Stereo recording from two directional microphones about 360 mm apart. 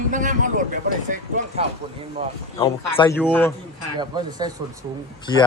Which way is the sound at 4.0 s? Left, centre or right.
Centre.